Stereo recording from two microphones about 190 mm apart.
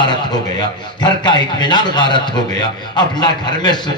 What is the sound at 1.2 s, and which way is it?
A man's voice, 25° left (ahead or behind).